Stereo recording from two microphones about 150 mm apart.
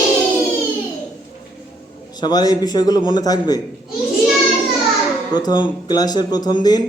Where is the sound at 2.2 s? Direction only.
25° left (ahead or behind).